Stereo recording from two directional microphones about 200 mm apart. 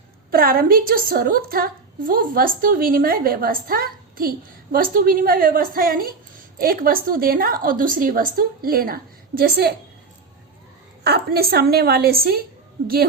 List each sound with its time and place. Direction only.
0.3 s a woman's voice: 45° right (ahead or behind)
11.0 s a woman's voice: 55° right (ahead or behind)